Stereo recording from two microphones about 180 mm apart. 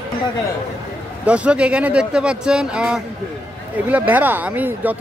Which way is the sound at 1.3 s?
5° right (ahead or behind).